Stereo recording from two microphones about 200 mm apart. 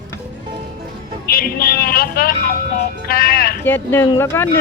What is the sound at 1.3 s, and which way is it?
Speech, 45° left (ahead or behind).